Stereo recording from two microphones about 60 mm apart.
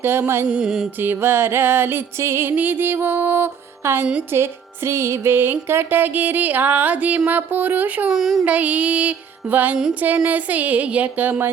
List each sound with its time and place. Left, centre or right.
0.0 s music: right
0.4 s mantra: centre
1.0 s music: right
4.3 s speech: right
4.9 s music: right
8.1 s mantra: centre
8.4 s music: right